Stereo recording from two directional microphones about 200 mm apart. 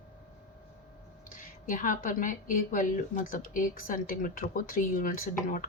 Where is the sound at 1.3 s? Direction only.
40° left (ahead or behind).